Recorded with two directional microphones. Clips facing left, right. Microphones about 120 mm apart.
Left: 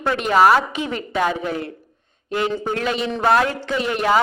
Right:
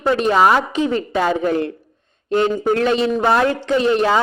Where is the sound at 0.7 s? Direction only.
35° right (ahead or behind).